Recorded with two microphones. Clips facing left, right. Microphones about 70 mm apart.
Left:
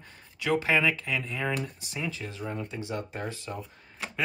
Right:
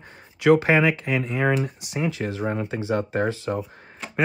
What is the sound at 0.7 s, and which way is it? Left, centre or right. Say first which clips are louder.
Speech: right 6 dB; right.